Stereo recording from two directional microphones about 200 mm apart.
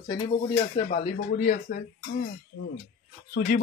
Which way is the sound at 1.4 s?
40° left (ahead or behind).